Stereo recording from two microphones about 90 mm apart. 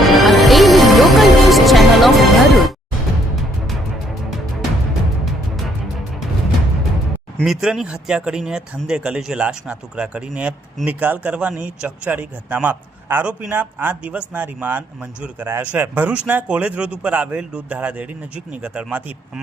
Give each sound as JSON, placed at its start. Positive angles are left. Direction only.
{"t": 0.0, "sound": "music", "side_deg": 0}
{"t": 7.4, "sound": "a man's voice", "side_deg": -5}